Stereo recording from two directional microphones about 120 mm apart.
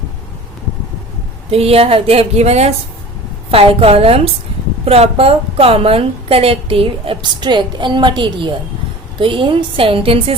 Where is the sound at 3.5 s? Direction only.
55° right (ahead or behind).